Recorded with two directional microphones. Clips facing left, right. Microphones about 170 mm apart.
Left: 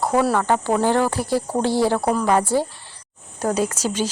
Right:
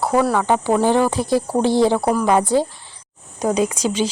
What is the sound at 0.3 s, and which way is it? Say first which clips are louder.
Speech: right 2 dB; 10° right (ahead or behind).